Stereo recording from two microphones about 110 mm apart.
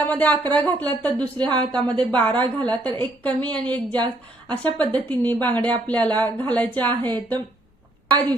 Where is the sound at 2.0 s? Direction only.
10° left (ahead or behind).